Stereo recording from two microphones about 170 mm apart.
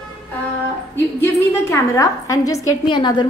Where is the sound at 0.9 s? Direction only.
15° left (ahead or behind).